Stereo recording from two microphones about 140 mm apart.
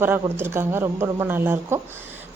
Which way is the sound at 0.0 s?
15° right (ahead or behind).